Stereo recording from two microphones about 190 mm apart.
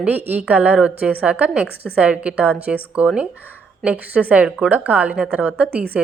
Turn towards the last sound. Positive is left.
turn(degrees=-5)  # may be behind; listen again after turning